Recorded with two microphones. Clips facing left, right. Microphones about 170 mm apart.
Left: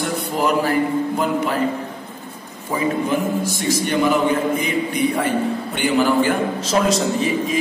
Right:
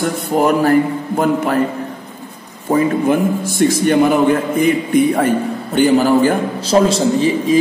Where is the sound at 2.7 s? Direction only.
55° right (ahead or behind).